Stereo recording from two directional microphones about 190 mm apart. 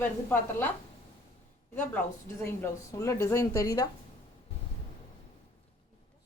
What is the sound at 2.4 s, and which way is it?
A woman's voice, 15° left (ahead or behind).